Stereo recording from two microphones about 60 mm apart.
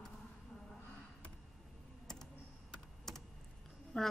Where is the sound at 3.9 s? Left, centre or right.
Centre.